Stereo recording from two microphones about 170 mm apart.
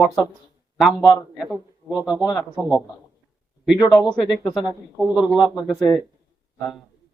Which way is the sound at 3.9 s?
Centre (ahead or behind).